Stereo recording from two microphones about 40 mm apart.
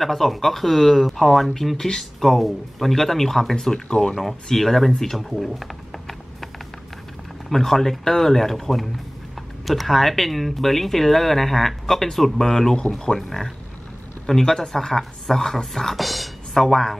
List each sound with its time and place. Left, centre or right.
0.0 s speech: centre
4.2 s speech: centre
5.1 s a sound: centre
7.4 s speech: centre
14.2 s speech: centre